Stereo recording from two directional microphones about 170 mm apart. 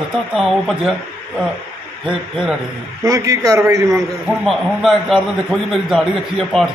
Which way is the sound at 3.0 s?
20° right (ahead or behind).